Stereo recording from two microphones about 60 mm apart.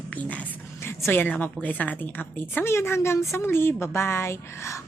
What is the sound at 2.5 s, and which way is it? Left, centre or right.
A woman's voice, left.